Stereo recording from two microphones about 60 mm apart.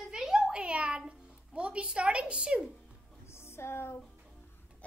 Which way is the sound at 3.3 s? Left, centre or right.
Left.